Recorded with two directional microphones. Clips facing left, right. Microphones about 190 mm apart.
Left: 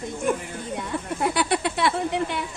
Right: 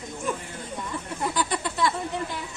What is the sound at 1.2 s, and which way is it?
Speech, 70° left (ahead or behind).